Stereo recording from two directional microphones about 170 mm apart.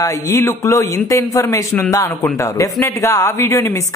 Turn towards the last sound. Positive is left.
turn(degrees=20)  # may be behind; listen again after turning